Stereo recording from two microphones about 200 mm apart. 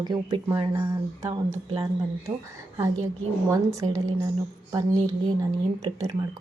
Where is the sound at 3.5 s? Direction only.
15° right (ahead or behind).